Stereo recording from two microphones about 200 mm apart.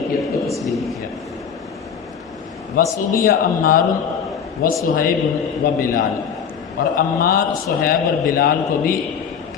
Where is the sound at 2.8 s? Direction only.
45° left (ahead or behind).